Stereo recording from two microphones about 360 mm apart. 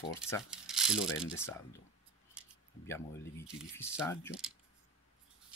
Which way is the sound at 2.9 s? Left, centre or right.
Centre.